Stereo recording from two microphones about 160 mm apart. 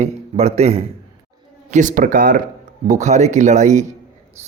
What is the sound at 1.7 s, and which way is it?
Speech, 50° right (ahead or behind).